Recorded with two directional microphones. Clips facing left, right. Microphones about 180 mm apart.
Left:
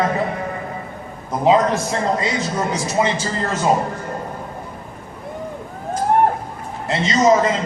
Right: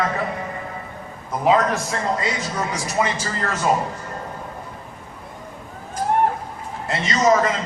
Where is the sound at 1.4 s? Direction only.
25° left (ahead or behind).